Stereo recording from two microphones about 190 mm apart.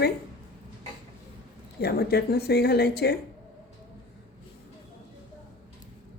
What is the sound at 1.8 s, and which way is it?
Speech, 55° left (ahead or behind).